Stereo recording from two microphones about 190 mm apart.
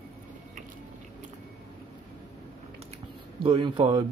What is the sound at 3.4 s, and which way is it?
Speech, 30° right (ahead or behind).